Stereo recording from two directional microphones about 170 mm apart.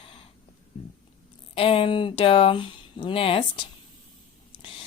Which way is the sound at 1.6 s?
35° left (ahead or behind).